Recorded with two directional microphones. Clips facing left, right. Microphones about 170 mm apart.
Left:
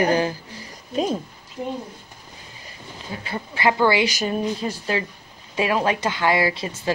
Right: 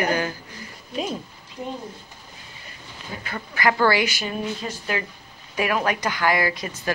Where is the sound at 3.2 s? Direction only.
25° left (ahead or behind).